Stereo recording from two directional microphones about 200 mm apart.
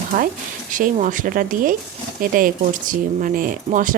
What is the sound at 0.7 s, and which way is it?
Speech, 40° right (ahead or behind).